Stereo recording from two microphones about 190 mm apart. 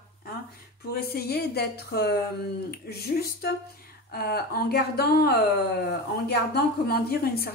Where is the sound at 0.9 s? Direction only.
55° left (ahead or behind).